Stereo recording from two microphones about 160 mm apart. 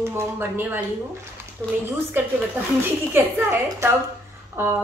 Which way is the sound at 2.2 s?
15° right (ahead or behind).